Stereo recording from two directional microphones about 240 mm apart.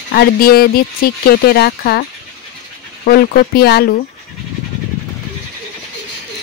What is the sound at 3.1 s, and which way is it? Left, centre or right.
Speech, left.